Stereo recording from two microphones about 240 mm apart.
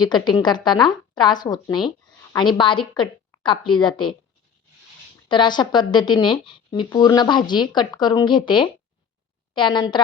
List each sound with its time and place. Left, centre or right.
0.0 s a woman's voice: centre
5.3 s speech: centre